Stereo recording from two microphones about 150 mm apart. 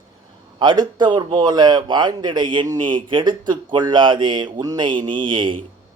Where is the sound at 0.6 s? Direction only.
30° right (ahead or behind).